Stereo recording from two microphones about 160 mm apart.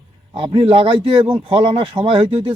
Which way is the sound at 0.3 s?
35° right (ahead or behind).